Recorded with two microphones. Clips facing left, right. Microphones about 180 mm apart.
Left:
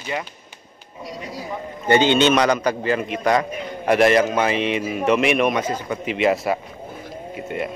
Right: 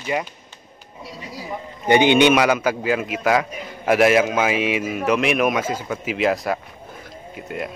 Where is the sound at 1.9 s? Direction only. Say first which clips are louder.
Right 2 dB; 15° right (ahead or behind); by 7.6 s centre (ahead or behind).